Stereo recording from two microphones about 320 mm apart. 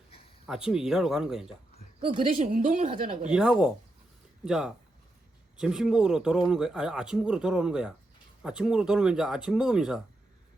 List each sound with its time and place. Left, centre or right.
0.4 s speech: centre
2.0 s a woman's voice: centre
3.2 s speech: centre